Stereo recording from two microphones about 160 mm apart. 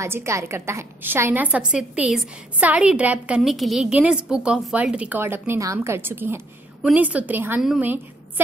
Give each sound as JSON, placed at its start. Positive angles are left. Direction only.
{"t": 0.0, "sound": "a woman's voice", "side_deg": -15}